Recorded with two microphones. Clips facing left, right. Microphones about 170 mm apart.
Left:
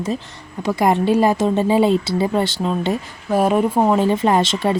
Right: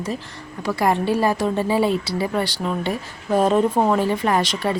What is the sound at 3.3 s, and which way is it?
Speech, 10° left (ahead or behind).